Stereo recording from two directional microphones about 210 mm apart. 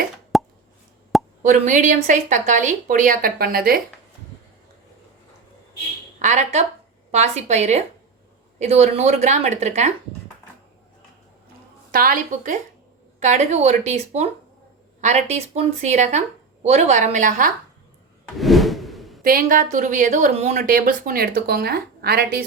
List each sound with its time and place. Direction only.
0.3 s plop: centre (ahead or behind)
1.4 s a woman's voice: 35° right (ahead or behind)
6.1 s a woman's voice: 35° right (ahead or behind)
11.9 s a woman's voice: 40° right (ahead or behind)
18.3 s whoosh: centre (ahead or behind)
19.2 s speech: 45° right (ahead or behind)